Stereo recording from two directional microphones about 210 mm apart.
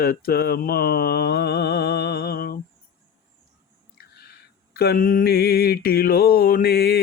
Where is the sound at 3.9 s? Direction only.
45° left (ahead or behind).